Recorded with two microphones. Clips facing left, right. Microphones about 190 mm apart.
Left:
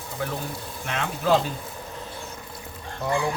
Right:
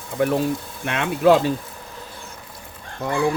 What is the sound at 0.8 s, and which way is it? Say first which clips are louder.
Speech: right 9 dB; 70° right (ahead or behind).